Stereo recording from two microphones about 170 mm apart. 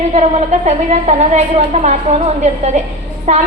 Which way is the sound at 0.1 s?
40° right (ahead or behind).